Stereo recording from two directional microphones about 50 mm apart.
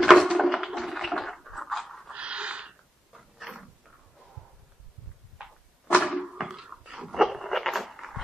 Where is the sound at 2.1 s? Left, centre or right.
Right.